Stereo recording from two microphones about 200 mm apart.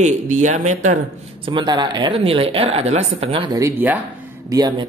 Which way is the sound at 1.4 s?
25° right (ahead or behind).